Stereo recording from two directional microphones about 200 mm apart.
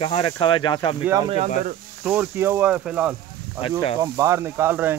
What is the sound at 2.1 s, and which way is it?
Speech, 10° right (ahead or behind).